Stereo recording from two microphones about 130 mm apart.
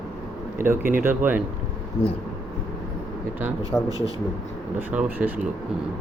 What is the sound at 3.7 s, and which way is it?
Speech, 20° left (ahead or behind).